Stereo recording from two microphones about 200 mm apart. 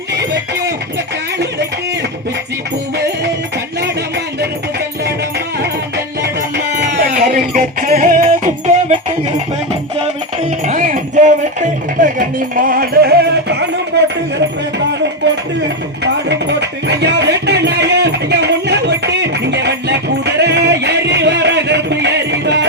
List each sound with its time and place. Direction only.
6.8 s music: 55° right (ahead or behind); by 9.1 s 40° right (ahead or behind)
10.7 s music: 40° right (ahead or behind); by 13.7 s 60° right (ahead or behind)
13.9 s a sound: 55° right (ahead or behind)
16.3 s music: 60° right (ahead or behind)